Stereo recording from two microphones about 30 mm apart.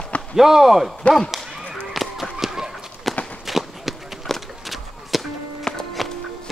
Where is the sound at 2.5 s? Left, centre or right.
Centre.